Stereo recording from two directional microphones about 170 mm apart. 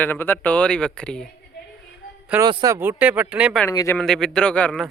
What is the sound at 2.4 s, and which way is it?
Speech, 25° right (ahead or behind).